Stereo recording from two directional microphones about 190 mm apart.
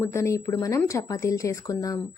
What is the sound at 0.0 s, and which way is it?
Speech, 15° left (ahead or behind).